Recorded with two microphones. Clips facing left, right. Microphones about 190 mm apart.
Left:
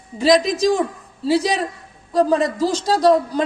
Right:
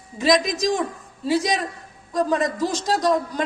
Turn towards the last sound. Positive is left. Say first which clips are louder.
# left 6 dB
turn(degrees=30)  # may be behind; listen again after turning